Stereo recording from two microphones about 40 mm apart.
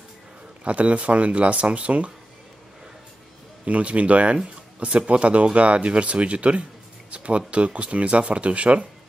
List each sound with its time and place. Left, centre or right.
0.7 s speech: right
3.6 s speech: right